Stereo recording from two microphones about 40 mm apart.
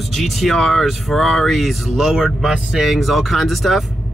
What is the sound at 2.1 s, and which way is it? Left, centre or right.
Speech, centre.